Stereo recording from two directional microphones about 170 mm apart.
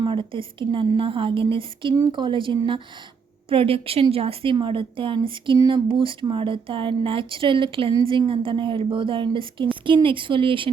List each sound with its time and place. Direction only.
0.0 s a woman's voice: 30° right (ahead or behind)